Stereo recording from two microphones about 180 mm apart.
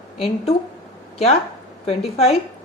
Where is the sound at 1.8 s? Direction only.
35° left (ahead or behind).